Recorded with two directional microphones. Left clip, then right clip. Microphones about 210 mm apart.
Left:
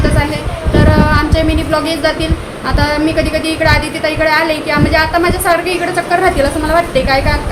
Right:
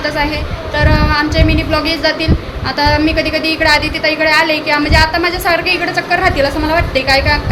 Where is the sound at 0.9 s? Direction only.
15° left (ahead or behind).